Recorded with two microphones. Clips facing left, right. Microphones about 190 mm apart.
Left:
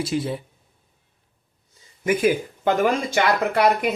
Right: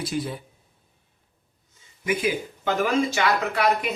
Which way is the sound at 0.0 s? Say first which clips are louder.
Left 4 dB; 25° left (ahead or behind).